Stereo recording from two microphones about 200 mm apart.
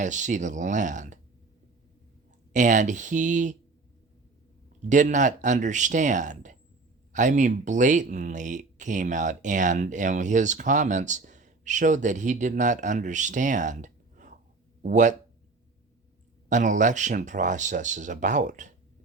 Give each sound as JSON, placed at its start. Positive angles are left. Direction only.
{"t": 0.0, "sound": "speech", "side_deg": -40}
{"t": 2.5, "sound": "speech", "side_deg": -40}
{"t": 4.9, "sound": "speech", "side_deg": -40}
{"t": 16.5, "sound": "speech", "side_deg": -40}